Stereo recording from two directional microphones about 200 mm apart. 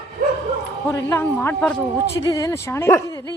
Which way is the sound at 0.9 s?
15° left (ahead or behind).